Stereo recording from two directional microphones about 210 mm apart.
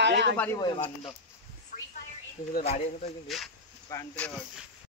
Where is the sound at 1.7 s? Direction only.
40° left (ahead or behind).